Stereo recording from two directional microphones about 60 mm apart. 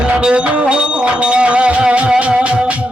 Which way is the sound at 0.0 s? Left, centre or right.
Centre.